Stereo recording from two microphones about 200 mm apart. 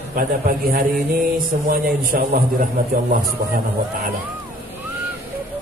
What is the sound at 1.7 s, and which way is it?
Speech, 45° right (ahead or behind).